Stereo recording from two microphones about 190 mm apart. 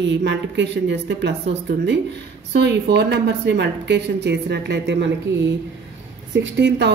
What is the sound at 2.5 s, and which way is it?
A woman's voice, 60° right (ahead or behind).